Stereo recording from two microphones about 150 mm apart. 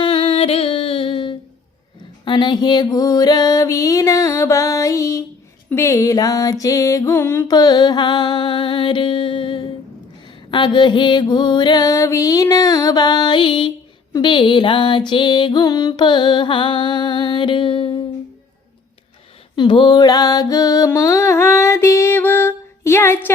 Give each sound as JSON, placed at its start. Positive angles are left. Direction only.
{"t": 0.0, "sound": "music", "side_deg": 35}
{"t": 7.5, "sound": "music", "side_deg": 30}
{"t": 19.5, "sound": "mantra", "side_deg": 30}